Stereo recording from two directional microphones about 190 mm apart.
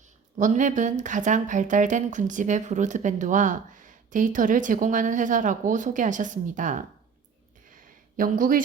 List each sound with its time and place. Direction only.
0.3 s speech: 40° right (ahead or behind)
8.1 s speech: 45° right (ahead or behind)